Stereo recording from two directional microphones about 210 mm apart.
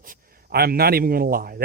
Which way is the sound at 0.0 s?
40° right (ahead or behind).